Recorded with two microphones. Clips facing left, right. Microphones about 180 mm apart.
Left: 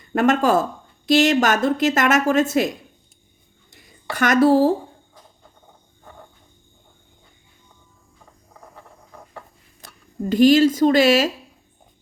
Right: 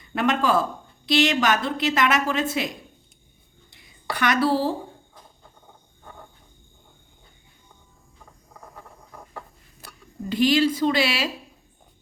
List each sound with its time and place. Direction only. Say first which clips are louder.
0.1 s a woman's voice: left 5 dB; 45° left (ahead or behind)
3.7 s a sound: even; 45° left (ahead or behind)
10.2 s a woman's voice: left 6 dB; 45° left (ahead or behind)